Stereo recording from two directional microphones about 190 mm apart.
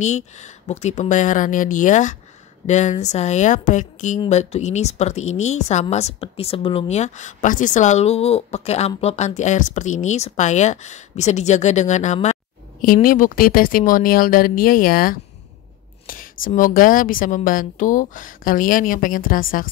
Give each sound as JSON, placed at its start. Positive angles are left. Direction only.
{"t": 0.0, "sound": "a woman's voice", "side_deg": 35}